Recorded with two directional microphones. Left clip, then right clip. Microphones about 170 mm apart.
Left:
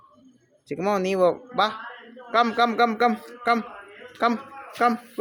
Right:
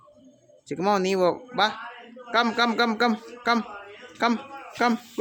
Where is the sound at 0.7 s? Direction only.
10° right (ahead or behind).